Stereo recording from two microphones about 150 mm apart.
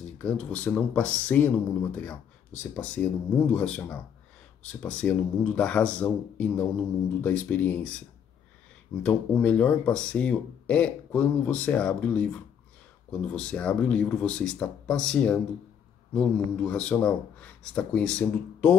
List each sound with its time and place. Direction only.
0.2 s speech: 10° left (ahead or behind)
9.0 s speech: 10° left (ahead or behind)